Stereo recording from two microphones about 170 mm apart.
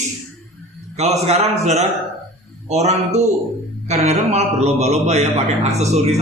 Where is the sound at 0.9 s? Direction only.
40° right (ahead or behind).